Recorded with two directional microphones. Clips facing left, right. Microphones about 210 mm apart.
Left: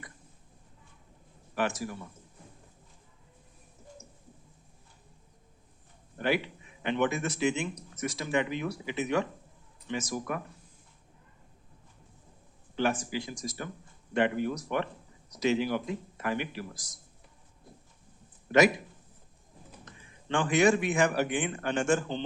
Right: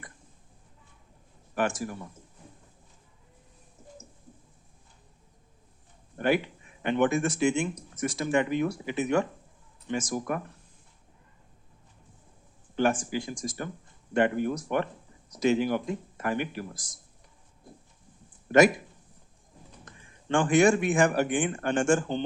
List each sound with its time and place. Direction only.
1.5 s speech: 50° right (ahead or behind)
6.1 s speech: 50° right (ahead or behind)
12.7 s speech: 50° right (ahead or behind)
18.5 s speech: 45° right (ahead or behind)
19.8 s speech: 45° right (ahead or behind)